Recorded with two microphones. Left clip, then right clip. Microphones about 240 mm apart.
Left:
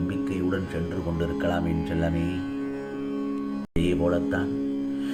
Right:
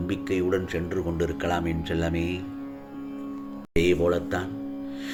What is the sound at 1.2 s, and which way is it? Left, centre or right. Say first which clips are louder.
Speech: left 1 dB; right.